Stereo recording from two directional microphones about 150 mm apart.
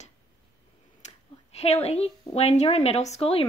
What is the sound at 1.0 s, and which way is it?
A woman's voice, 45° left (ahead or behind).